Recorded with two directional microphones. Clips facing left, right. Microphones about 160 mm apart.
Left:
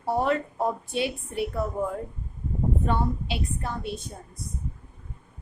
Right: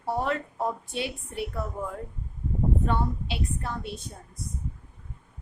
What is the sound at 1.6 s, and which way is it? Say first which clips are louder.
Speech: left 5 dB; 20° left (ahead or behind).